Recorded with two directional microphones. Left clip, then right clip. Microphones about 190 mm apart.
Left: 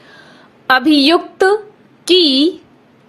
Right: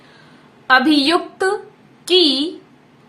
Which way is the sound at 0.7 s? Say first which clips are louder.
Left 2 dB; 30° left (ahead or behind).